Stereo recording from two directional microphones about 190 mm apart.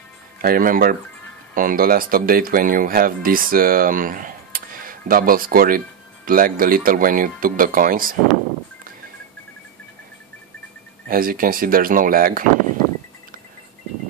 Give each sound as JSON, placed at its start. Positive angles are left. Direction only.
{"t": 0.4, "sound": "speech", "side_deg": -50}
{"t": 11.1, "sound": "speech", "side_deg": -50}